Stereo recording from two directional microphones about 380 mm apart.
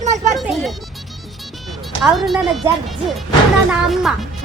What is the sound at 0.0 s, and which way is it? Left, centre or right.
Speech, centre.